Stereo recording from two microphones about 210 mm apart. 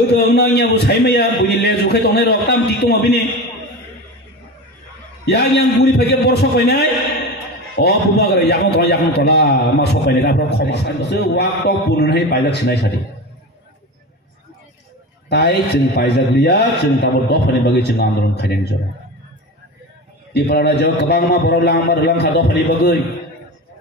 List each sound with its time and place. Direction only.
0.1 s a man's voice: 50° left (ahead or behind)
5.2 s a man's voice: 50° left (ahead or behind)
15.2 s a man's voice: 50° left (ahead or behind)
20.3 s a man's voice: 50° left (ahead or behind)